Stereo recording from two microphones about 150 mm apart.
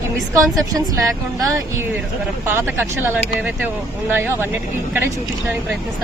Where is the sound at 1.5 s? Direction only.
20° right (ahead or behind).